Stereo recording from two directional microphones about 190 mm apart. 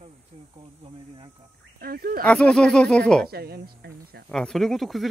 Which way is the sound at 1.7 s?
55° right (ahead or behind).